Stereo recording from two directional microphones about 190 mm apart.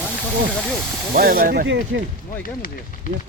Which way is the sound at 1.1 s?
45° right (ahead or behind).